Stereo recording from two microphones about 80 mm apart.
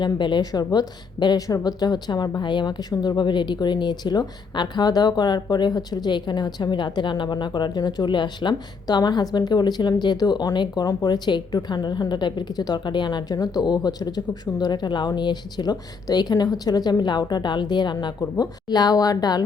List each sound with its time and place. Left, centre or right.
0.0 s a woman's voice: left
0.6 s a woman's voice: left
1.5 s a woman's voice: left
18.2 s a woman's voice: left